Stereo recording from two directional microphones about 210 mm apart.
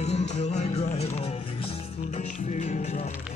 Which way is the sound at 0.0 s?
30° left (ahead or behind).